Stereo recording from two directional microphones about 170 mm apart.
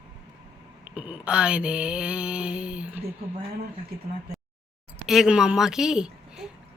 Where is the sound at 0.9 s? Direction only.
5° right (ahead or behind).